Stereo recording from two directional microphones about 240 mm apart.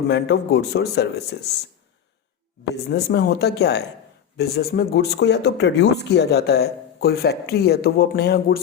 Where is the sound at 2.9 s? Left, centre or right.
Left.